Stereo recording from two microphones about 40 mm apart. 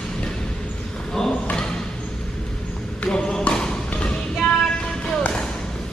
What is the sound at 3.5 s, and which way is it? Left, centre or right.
Music, centre.